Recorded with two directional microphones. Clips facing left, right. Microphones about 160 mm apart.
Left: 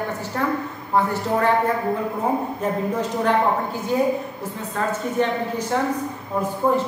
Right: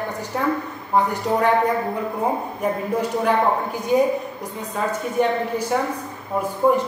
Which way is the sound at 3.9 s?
15° right (ahead or behind).